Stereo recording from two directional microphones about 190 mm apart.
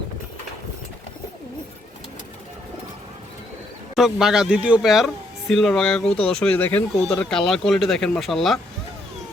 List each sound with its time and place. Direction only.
3.9 s speech: centre (ahead or behind)